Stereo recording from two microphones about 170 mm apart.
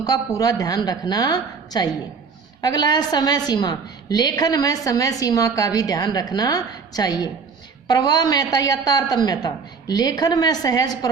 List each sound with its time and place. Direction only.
0.0 s a woman's voice: 20° left (ahead or behind)